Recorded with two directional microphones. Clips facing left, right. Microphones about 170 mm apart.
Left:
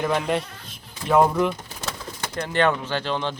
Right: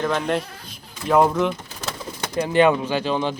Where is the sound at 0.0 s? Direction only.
10° left (ahead or behind).